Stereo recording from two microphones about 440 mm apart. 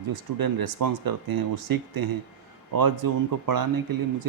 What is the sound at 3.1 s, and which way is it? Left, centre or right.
Speech, right.